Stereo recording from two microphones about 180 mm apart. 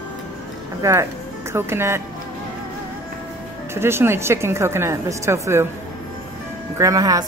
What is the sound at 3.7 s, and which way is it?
A woman's voice, 15° right (ahead or behind).